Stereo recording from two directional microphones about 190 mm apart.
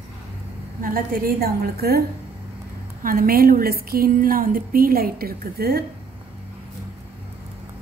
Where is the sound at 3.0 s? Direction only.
50° right (ahead or behind).